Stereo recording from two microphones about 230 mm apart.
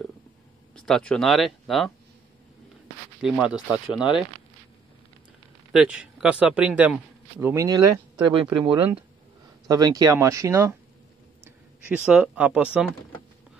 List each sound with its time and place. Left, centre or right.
0.7 s speech: centre
3.2 s speech: centre
5.7 s a man's voice: centre